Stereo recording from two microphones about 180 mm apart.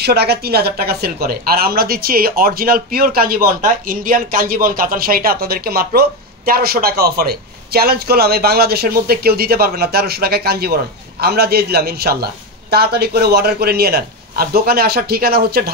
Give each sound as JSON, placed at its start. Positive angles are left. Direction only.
{"t": 0.0, "sound": "speech", "side_deg": -60}